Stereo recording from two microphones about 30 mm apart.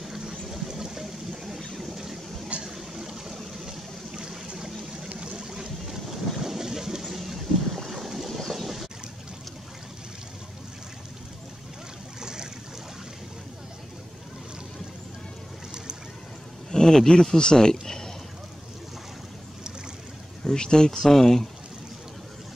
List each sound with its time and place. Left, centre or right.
0.5 s a sound: centre
1.8 s boat: centre
2.6 s vehicle: centre
4.1 s boat: right
5.3 s vehicle: centre
5.9 s boat: centre
7.1 s boat: centre
12.2 s boat: right
16.7 s speech: centre
17.3 s speech: left
20.4 s speech: left
21.0 s speech: centre